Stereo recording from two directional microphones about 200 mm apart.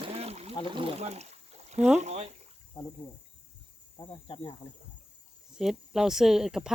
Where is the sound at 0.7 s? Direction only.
25° right (ahead or behind).